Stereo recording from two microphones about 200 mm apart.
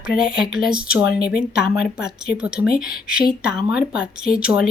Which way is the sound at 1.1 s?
50° left (ahead or behind).